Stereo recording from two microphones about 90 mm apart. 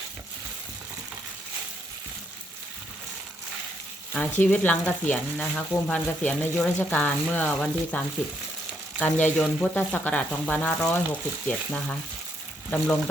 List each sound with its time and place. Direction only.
4.1 s frying: 20° left (ahead or behind)